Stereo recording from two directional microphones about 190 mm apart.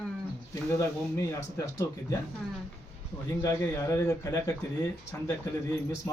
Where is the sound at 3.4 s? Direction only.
15° left (ahead or behind).